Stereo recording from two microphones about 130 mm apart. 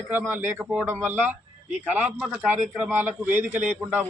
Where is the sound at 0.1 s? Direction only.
15° right (ahead or behind).